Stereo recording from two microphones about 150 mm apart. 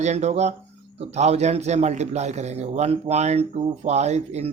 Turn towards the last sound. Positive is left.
turn(degrees=-45)  # may be behind; listen again after turning